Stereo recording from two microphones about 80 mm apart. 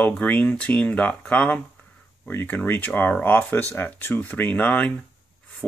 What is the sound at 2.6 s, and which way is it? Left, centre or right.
Speech, centre.